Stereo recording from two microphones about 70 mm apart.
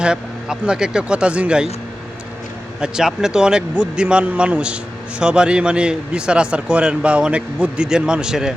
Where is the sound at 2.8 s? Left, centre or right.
Centre.